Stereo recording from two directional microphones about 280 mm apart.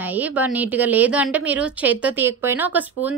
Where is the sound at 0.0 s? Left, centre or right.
Centre.